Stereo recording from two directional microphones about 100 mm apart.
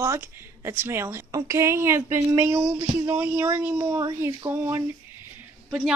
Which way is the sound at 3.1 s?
20° right (ahead or behind).